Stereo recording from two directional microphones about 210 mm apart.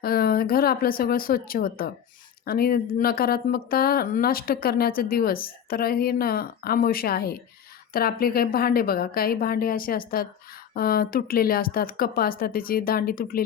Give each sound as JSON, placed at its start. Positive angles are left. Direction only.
{"t": 0.0, "sound": "speech", "side_deg": 45}